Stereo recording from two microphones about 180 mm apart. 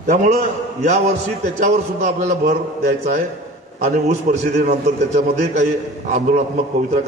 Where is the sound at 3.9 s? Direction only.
45° right (ahead or behind).